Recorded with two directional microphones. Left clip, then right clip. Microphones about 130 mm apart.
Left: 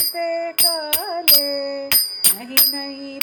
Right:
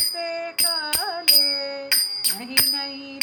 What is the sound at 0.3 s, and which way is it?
Music, 55° left (ahead or behind).